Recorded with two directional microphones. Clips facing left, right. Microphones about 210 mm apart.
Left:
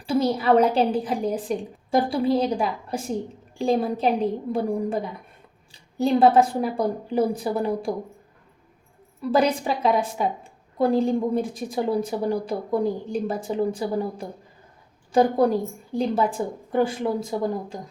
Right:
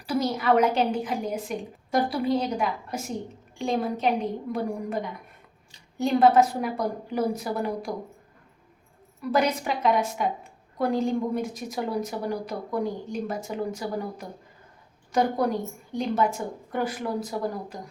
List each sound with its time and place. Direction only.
0.0 s a woman's voice: 30° left (ahead or behind)
9.2 s a woman's voice: 30° left (ahead or behind)